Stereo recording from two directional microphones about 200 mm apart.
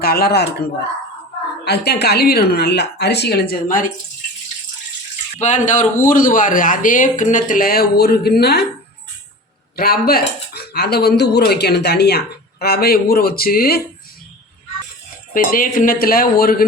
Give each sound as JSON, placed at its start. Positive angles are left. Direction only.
{"t": 0.0, "sound": "speech", "side_deg": 50}
{"t": 1.6, "sound": "a woman's voice", "side_deg": 55}
{"t": 3.5, "sound": "speech", "side_deg": 40}
{"t": 5.4, "sound": "speech", "side_deg": 35}
{"t": 9.7, "sound": "speech", "side_deg": 50}
{"t": 15.3, "sound": "speech", "side_deg": 45}